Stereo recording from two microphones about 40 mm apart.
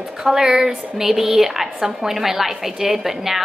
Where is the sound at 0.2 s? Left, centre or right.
Centre.